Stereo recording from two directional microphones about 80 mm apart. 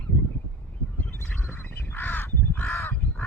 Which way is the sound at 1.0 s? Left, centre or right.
Left.